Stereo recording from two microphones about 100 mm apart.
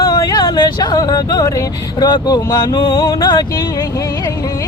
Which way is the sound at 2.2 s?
40° left (ahead or behind).